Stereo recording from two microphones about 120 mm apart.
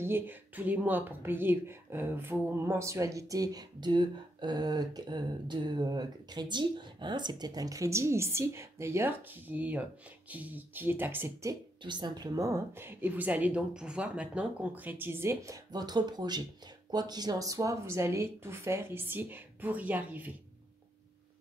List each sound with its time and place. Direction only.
0.0 s speech: 15° right (ahead or behind)
11.8 s speech: 40° right (ahead or behind); by 20.3 s 15° right (ahead or behind)